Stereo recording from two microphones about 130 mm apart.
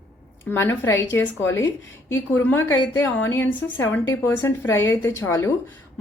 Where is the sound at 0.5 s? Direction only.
20° left (ahead or behind).